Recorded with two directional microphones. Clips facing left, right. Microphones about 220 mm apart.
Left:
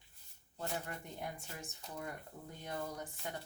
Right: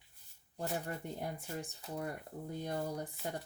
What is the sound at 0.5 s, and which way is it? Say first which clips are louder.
Speech: right 3 dB; 35° right (ahead or behind).